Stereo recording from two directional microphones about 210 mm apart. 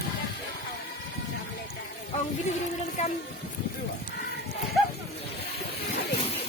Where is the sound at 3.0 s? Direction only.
35° left (ahead or behind).